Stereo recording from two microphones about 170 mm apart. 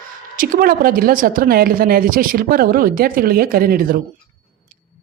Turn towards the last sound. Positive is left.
turn(degrees=-60)  # may be behind; listen again after turning